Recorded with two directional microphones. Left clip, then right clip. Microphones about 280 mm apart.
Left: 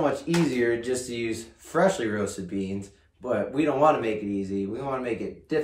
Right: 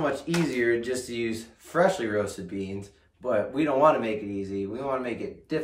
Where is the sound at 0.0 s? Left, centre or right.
Centre.